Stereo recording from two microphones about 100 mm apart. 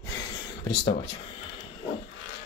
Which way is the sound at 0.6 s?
60° left (ahead or behind).